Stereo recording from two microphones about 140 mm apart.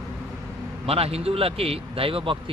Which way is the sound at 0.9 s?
45° right (ahead or behind).